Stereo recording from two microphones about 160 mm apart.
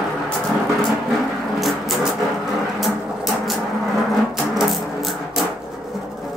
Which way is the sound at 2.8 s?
Centre (ahead or behind).